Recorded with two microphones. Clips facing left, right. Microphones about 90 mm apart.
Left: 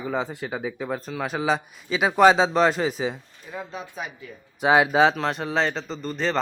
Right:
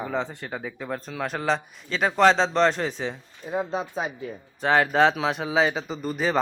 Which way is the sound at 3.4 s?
30° right (ahead or behind).